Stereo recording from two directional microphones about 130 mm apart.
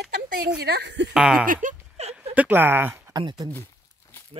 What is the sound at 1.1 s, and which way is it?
Speech, 5° right (ahead or behind).